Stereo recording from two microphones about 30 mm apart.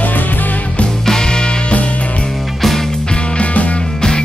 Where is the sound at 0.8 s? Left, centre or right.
Left.